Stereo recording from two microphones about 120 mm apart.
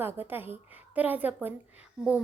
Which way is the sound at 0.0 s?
15° right (ahead or behind).